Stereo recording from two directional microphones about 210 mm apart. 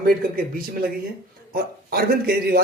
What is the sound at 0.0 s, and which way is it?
Speech, 45° right (ahead or behind).